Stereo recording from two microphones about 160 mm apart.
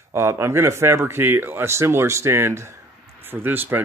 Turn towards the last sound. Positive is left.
turn(degrees=-15)  # may be behind; listen again after turning